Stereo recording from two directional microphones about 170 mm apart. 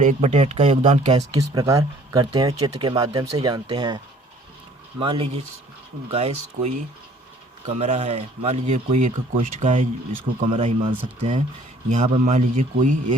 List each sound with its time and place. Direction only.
0.0 s speech: 45° right (ahead or behind)
1.4 s speech: 20° right (ahead or behind); by 9.4 s 40° right (ahead or behind)
10.4 s speech: 35° right (ahead or behind)